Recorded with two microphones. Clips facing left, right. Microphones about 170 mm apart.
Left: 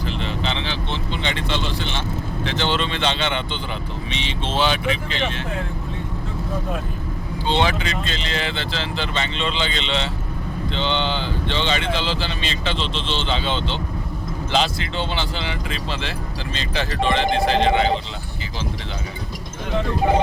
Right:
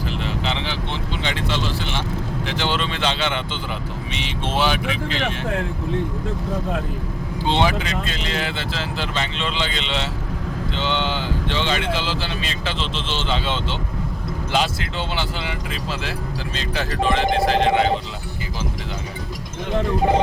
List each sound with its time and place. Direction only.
0.0 s vehicle: 5° right (ahead or behind)
1.2 s speech: 5° right (ahead or behind)
7.6 s speech: 5° right (ahead or behind)